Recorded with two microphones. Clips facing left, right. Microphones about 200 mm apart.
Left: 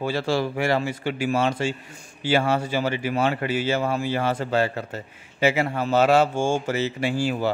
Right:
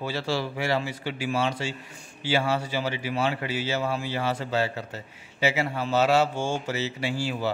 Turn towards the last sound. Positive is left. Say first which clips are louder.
# left 5 dB
turn(degrees=50)  # may be behind; listen again after turning